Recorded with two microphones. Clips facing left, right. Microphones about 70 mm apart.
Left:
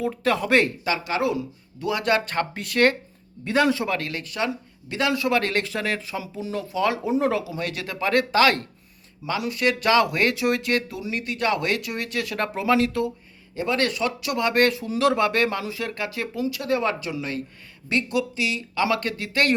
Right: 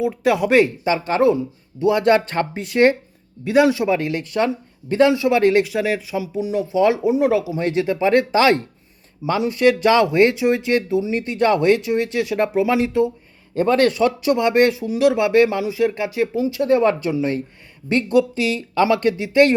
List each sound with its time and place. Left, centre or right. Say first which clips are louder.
0.0 s speech: right 5 dB; centre
0.9 s speech: right 7 dB; right
3.4 s speech: right 6 dB; centre
7.4 s speech: right 10 dB; right
13.6 s speech: right 8 dB; right; by 19.5 s centre